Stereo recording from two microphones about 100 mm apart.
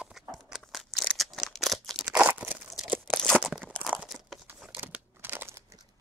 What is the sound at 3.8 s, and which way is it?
Crumpling, centre (ahead or behind).